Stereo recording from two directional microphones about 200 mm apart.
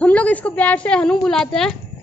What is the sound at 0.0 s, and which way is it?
A woman's voice, 5° left (ahead or behind).